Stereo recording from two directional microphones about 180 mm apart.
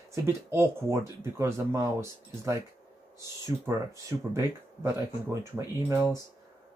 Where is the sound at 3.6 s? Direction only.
15° right (ahead or behind).